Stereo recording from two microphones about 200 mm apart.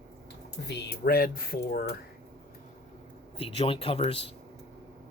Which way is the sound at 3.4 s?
25° left (ahead or behind).